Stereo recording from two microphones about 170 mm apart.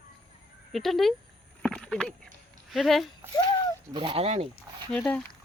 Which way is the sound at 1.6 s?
5° left (ahead or behind).